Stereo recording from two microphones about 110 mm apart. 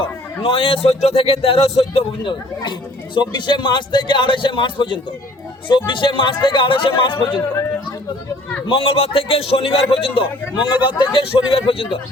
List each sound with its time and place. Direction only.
0.4 s a man's voice: 55° left (ahead or behind)
2.2 s a man's voice: 45° left (ahead or behind)
8.6 s a man's voice: 55° left (ahead or behind)
10.8 s a man's voice: 45° left (ahead or behind)